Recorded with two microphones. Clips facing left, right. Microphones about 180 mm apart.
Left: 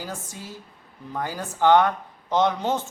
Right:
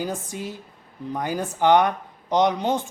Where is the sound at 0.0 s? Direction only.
20° right (ahead or behind).